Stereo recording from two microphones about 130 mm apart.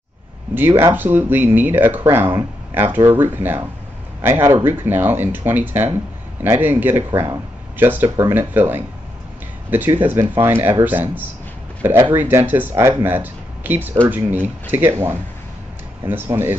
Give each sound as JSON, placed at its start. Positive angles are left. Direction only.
{"t": 0.6, "sound": "a man's voice", "side_deg": -15}